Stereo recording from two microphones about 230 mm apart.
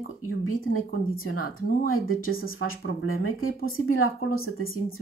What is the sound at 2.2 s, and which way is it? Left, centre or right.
Speech, left.